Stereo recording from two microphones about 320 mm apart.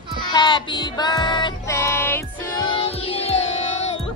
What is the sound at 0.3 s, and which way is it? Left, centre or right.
Child singing, centre.